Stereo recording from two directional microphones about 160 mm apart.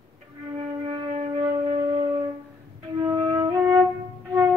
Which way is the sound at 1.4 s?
35° right (ahead or behind).